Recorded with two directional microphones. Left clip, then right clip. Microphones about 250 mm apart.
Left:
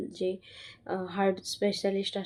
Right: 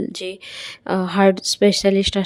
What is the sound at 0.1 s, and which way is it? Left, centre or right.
Speech, right.